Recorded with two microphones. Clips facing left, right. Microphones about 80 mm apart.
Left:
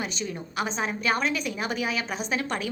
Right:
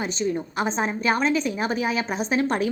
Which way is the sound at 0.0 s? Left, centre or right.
Right.